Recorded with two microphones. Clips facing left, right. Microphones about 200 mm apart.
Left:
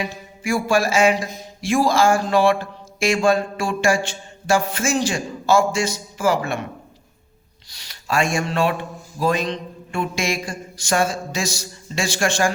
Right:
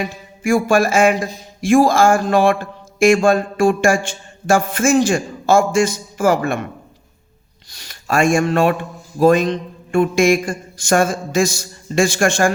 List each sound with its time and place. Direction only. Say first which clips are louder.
0.0 s speech: right 5 dB; 50° right (ahead or behind)
7.7 s speech: right 4 dB; 50° right (ahead or behind)